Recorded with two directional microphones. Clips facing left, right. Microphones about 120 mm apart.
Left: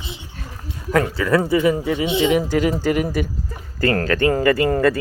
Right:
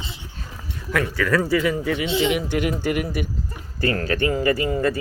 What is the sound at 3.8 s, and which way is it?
Speech, 45° left (ahead or behind).